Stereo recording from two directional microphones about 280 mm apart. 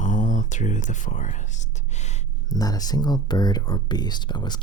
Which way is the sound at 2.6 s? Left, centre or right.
Centre.